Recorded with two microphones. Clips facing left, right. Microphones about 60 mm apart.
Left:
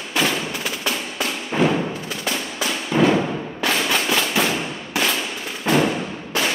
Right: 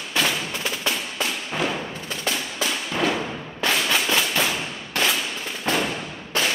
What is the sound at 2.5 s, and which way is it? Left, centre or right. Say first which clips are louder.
Music: left 5 dB; centre.